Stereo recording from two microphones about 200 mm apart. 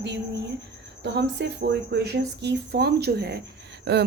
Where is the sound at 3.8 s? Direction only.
55° right (ahead or behind).